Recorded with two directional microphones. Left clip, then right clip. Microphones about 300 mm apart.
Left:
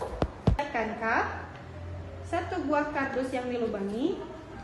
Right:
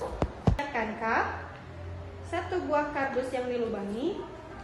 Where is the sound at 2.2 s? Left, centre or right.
Left.